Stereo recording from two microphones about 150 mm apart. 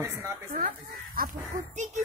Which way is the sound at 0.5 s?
70° right (ahead or behind).